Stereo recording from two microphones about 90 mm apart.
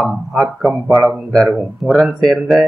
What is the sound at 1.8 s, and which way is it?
Speech, 20° right (ahead or behind).